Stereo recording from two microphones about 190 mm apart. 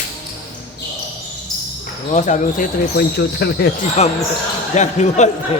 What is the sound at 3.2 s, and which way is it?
Speech, 60° left (ahead or behind).